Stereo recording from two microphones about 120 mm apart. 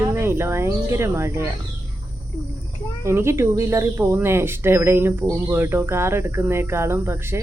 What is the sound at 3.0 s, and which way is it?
Speech, 20° right (ahead or behind).